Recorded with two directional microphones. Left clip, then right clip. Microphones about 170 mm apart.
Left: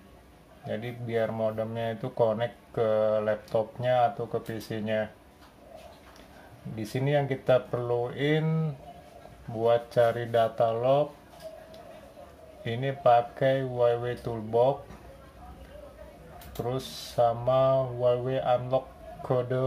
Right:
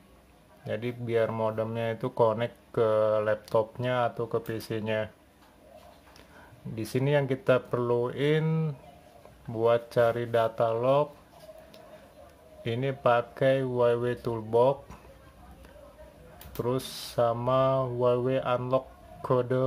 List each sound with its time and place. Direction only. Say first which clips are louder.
0.7 s speech: right 2 dB; 35° right (ahead or behind)
6.7 s speech: right 1 dB; 30° right (ahead or behind)
12.6 s speech: left 2 dB; 30° right (ahead or behind)
16.6 s speech: right 2 dB; 35° right (ahead or behind)